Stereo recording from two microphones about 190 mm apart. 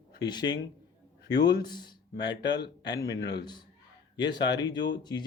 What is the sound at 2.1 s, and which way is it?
A man's voice, 65° left (ahead or behind).